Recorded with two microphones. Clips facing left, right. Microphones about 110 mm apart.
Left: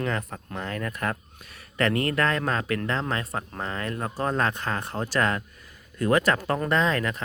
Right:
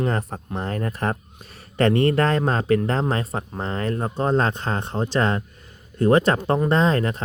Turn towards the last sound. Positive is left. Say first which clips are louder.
# right 4 dB
turn(degrees=-30)  # may be behind; listen again after turning